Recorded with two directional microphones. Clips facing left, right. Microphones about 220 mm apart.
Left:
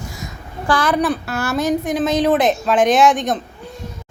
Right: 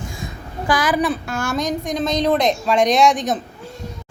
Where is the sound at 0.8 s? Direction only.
Centre (ahead or behind).